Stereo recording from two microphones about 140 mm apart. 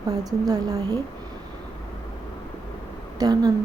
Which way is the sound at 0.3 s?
25° right (ahead or behind).